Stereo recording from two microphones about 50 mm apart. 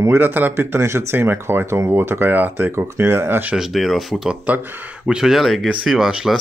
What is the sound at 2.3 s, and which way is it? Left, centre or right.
Speech, right.